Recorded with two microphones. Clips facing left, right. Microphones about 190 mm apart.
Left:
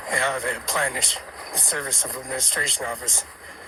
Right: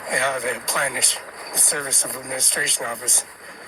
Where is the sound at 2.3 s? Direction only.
15° right (ahead or behind).